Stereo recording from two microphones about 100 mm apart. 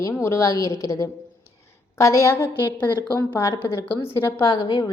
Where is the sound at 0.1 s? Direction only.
30° left (ahead or behind).